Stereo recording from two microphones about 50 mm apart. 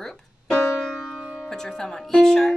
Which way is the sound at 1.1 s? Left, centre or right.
Left.